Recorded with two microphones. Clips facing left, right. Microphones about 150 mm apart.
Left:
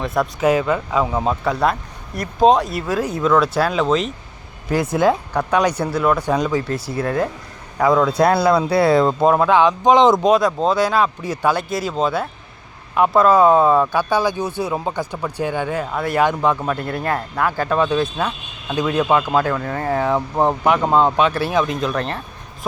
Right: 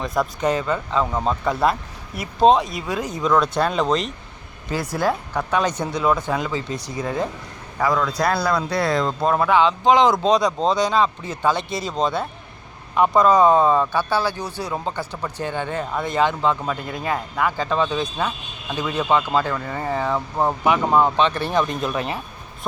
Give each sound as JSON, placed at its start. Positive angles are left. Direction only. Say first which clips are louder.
{"t": 0.0, "sound": "speech", "louder": "left 3 dB", "side_deg": 0}
{"t": 5.3, "sound": "speech", "louder": "left 4 dB", "side_deg": 10}
{"t": 7.0, "sound": "speech", "louder": "left 4 dB", "side_deg": 5}
{"t": 8.2, "sound": "speech", "louder": "left 6 dB", "side_deg": 25}
{"t": 9.2, "sound": "speech", "louder": "even", "side_deg": 5}
{"t": 10.3, "sound": "speech", "louder": "left 2 dB", "side_deg": 5}
{"t": 16.8, "sound": "speech", "louder": "left 5 dB", "side_deg": 65}
{"t": 17.1, "sound": "speech", "louder": "left 1 dB", "side_deg": -5}
{"t": 20.1, "sound": "speech", "louder": "left 4 dB", "side_deg": 25}